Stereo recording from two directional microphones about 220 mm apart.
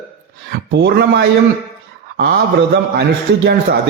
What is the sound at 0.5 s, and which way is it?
Speech, 50° right (ahead or behind).